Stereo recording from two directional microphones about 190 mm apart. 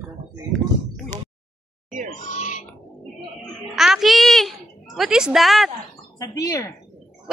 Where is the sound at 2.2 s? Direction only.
40° left (ahead or behind).